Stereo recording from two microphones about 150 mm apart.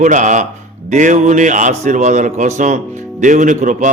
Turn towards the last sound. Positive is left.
turn(degrees=-55)  # may be behind; listen again after turning